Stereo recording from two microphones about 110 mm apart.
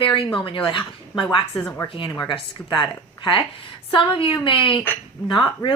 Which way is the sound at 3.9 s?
50° left (ahead or behind).